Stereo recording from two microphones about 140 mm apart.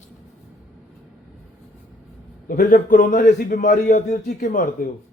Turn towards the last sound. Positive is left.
turn(degrees=65)  # may be behind; listen again after turning